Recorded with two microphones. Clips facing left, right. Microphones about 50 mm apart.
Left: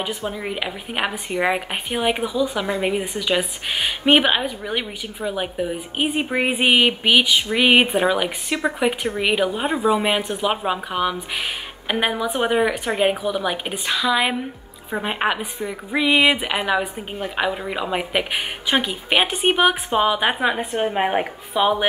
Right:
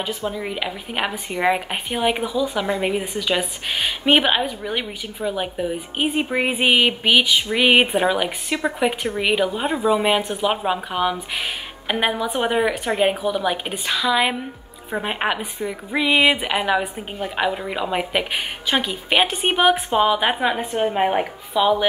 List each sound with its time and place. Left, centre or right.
0.3 s a woman's voice: centre
21.5 s a woman's voice: left